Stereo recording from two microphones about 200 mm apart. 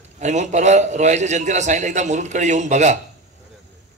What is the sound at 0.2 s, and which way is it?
A man's voice, 35° right (ahead or behind).